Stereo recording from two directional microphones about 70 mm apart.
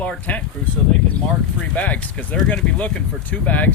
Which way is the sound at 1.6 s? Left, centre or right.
Centre.